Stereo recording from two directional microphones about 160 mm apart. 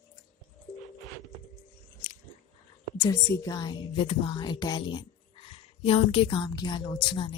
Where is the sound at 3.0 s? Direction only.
20° left (ahead or behind).